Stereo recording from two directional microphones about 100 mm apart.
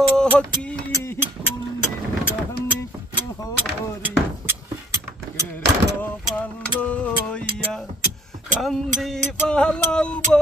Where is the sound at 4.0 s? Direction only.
25° right (ahead or behind).